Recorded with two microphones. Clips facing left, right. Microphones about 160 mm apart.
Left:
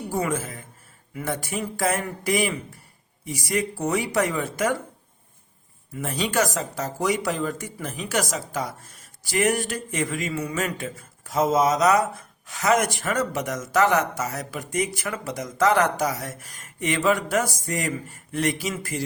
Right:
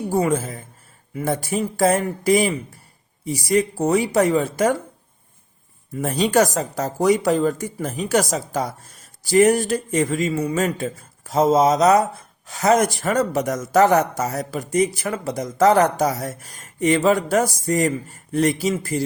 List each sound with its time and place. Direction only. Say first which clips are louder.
0.1 s speech: right 6 dB; 30° right (ahead or behind)
6.0 s speech: right 6 dB; 40° right (ahead or behind)